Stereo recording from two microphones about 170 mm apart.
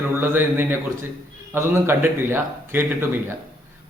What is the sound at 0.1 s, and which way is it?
A man's voice, 10° right (ahead or behind).